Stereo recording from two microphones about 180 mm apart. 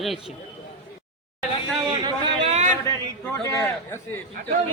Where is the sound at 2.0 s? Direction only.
30° right (ahead or behind).